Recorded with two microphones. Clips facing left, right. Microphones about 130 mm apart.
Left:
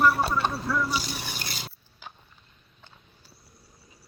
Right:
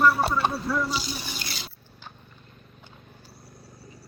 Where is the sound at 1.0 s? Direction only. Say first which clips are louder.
Right 1 dB; 65° left (ahead or behind).